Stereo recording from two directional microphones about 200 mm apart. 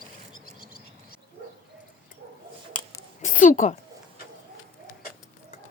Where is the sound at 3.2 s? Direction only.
40° left (ahead or behind).